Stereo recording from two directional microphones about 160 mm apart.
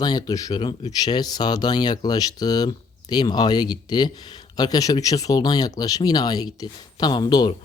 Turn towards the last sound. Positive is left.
turn(degrees=25)  # may be behind; listen again after turning